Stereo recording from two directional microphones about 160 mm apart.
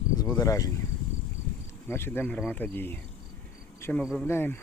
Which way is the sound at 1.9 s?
15° left (ahead or behind).